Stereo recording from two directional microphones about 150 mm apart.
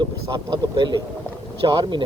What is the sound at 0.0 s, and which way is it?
Speech, 30° right (ahead or behind).